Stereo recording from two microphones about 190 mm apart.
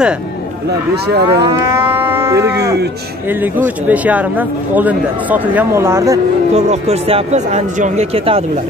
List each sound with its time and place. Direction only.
1.0 s cattle: 60° right (ahead or behind)
1.7 s livestock: 10° right (ahead or behind)
3.3 s speech: 10° right (ahead or behind)
6.5 s speech: 35° right (ahead or behind)